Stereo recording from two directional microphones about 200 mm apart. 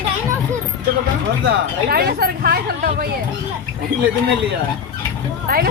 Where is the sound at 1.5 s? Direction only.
50° right (ahead or behind).